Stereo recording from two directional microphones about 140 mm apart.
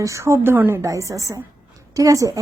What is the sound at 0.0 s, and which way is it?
Speech, 20° right (ahead or behind).